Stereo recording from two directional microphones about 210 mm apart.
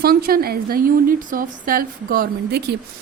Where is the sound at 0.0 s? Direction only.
45° right (ahead or behind).